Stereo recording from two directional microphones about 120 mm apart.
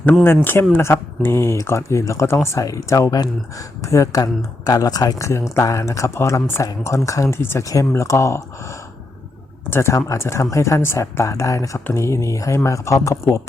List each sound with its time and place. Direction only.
0.4 s speech: 20° left (ahead or behind)
9.6 s speech: 20° left (ahead or behind)